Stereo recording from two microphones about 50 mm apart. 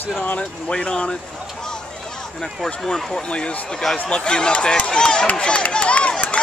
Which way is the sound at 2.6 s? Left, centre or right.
Centre.